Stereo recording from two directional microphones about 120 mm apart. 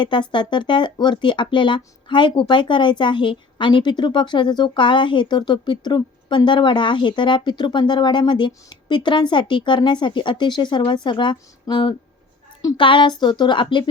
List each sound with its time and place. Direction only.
0.0 s speech: 40° left (ahead or behind)